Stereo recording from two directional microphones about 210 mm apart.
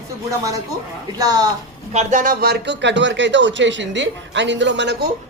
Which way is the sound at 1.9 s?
35° right (ahead or behind).